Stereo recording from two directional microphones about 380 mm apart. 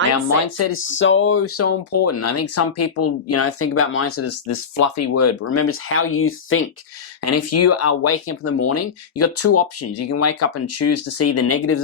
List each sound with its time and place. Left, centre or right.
0.1 s speech: left